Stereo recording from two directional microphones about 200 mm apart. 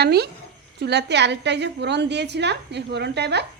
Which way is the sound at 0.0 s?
55° right (ahead or behind).